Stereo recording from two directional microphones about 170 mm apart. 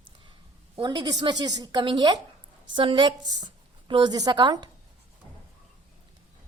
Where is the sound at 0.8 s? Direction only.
25° right (ahead or behind).